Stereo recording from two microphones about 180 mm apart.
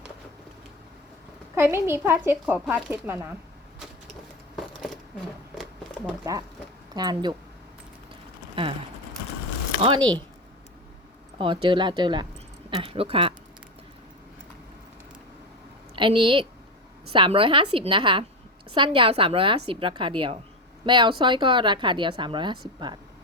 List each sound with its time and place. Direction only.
1.5 s speech: 15° right (ahead or behind)
6.3 s a woman's voice: 20° right (ahead or behind)
8.1 s a sound: 30° right (ahead or behind)
9.8 s a woman's voice: 25° right (ahead or behind)
11.3 s a woman's voice: 30° right (ahead or behind)
16.0 s a woman's voice: 30° right (ahead or behind)